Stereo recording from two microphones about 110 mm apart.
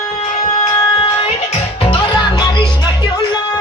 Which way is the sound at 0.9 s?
55° left (ahead or behind).